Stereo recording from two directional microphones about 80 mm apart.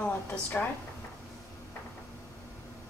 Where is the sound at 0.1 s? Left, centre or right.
Centre.